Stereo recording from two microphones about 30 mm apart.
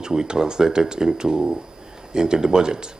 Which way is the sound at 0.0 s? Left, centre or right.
Right.